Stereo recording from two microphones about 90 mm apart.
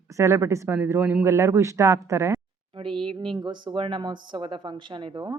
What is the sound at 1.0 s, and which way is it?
Speech, 20° right (ahead or behind).